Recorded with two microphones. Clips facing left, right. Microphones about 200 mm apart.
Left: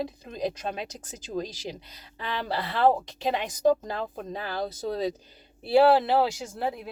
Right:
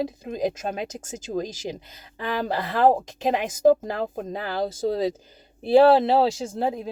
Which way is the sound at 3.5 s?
20° right (ahead or behind).